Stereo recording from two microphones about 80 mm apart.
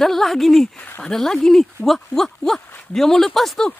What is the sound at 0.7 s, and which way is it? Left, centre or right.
Speech, left.